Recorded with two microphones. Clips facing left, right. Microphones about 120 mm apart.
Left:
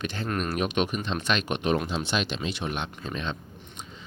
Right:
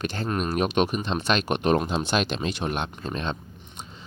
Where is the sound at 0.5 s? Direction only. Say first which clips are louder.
Right 5 dB; 35° right (ahead or behind).